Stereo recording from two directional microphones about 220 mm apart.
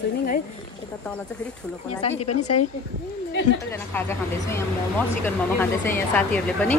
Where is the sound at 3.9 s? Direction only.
10° left (ahead or behind).